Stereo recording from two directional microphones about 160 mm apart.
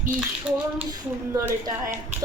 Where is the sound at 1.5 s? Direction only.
15° right (ahead or behind).